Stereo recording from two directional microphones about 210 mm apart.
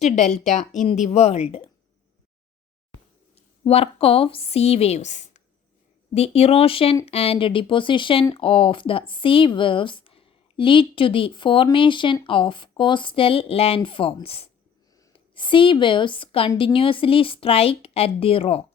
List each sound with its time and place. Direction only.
0.0 s a woman's voice: 35° left (ahead or behind)
3.3 s a woman's voice: 30° left (ahead or behind)